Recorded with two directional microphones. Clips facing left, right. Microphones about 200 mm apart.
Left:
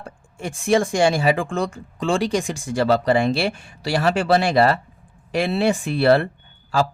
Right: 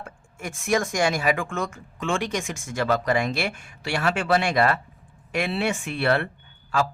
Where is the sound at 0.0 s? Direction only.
30° left (ahead or behind).